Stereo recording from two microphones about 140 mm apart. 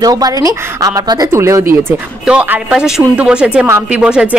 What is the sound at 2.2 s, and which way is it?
Speech, 5° right (ahead or behind).